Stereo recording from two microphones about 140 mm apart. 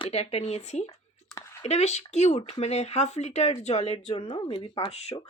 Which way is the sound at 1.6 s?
50° left (ahead or behind).